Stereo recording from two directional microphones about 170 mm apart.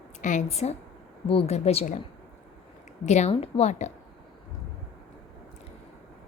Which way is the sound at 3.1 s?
40° left (ahead or behind).